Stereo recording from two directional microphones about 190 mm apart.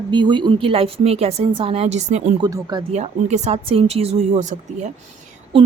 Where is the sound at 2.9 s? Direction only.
35° right (ahead or behind).